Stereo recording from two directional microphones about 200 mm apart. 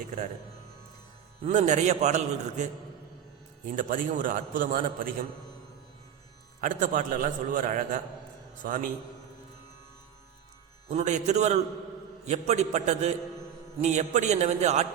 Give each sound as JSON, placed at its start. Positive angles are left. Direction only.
{"t": 1.5, "sound": "a man's voice", "side_deg": -35}
{"t": 3.8, "sound": "a man's voice", "side_deg": -45}
{"t": 6.6, "sound": "a man's voice", "side_deg": -40}
{"t": 10.8, "sound": "a man's voice", "side_deg": -35}